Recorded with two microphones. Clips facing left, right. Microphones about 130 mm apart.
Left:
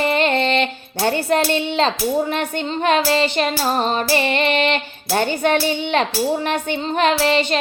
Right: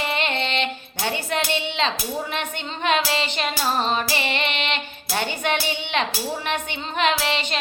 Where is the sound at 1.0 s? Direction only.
45° left (ahead or behind).